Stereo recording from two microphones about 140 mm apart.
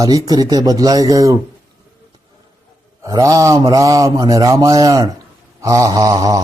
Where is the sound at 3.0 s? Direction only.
25° right (ahead or behind).